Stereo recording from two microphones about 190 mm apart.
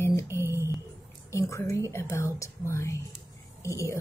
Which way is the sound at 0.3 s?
15° right (ahead or behind).